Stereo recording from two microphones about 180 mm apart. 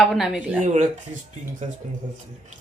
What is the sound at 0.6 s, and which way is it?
Speech, 40° right (ahead or behind).